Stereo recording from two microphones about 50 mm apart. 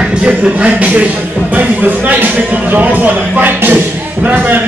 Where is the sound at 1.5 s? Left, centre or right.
Right.